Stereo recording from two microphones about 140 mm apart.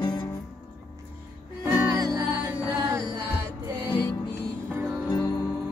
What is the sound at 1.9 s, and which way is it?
Music, 25° right (ahead or behind).